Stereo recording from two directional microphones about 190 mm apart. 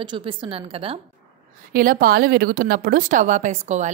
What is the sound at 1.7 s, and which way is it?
A woman's voice, 50° right (ahead or behind).